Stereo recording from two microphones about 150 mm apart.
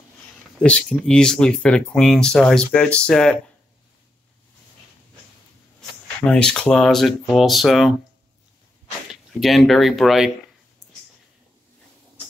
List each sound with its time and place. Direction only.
0.6 s speech: 5° left (ahead or behind)
5.8 s speech: 5° left (ahead or behind)
9.1 s speech: centre (ahead or behind)